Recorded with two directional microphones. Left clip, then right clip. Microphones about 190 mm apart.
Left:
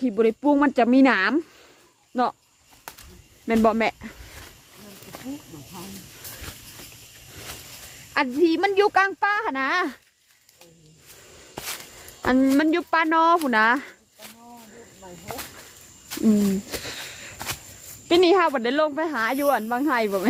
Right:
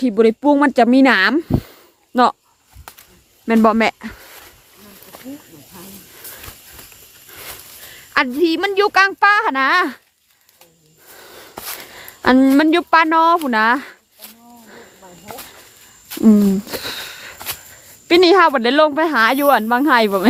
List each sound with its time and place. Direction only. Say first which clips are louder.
0.0 s a woman's voice: right 7 dB; 25° right (ahead or behind)
2.9 s snake: right 2 dB; 10° right (ahead or behind)
3.4 s speech: right 6 dB; 35° right (ahead or behind)
8.1 s a woman's voice: right 5 dB; 25° right (ahead or behind)
11.5 s a sound: right 2 dB; 20° right (ahead or behind)
12.2 s speech: right 8 dB; 35° right (ahead or behind)
13.4 s a sound: right 4 dB; 15° right (ahead or behind)
16.2 s speech: right 8 dB; 35° right (ahead or behind)